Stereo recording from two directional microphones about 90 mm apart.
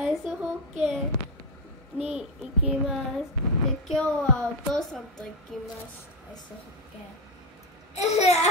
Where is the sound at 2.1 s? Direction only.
5° right (ahead or behind).